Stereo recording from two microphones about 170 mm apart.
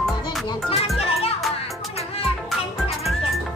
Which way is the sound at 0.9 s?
35° left (ahead or behind).